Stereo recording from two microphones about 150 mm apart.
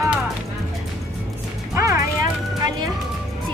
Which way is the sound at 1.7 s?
20° right (ahead or behind).